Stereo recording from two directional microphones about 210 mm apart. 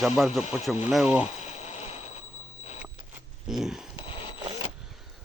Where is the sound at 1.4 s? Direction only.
30° left (ahead or behind).